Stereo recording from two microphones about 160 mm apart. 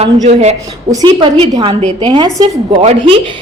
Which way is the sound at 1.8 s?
45° right (ahead or behind).